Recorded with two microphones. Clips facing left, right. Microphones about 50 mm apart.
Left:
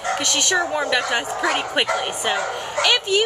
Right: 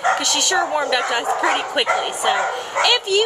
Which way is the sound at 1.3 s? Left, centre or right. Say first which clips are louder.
Right 3 dB; right.